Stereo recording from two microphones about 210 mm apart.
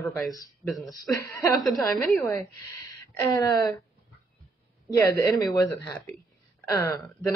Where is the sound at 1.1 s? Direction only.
15° left (ahead or behind).